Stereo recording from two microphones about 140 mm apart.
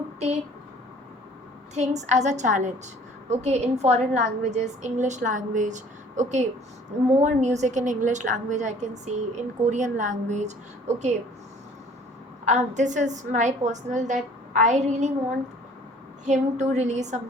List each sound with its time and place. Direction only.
1.7 s a woman's voice: 55° right (ahead or behind)
12.5 s a woman's voice: 60° right (ahead or behind)
16.2 s a woman's voice: 55° right (ahead or behind)